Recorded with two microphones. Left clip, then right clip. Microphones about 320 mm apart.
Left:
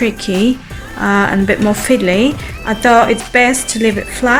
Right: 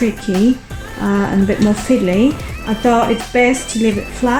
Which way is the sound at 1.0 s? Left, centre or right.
Left.